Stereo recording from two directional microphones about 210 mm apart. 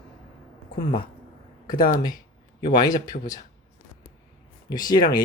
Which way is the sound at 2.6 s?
20° left (ahead or behind).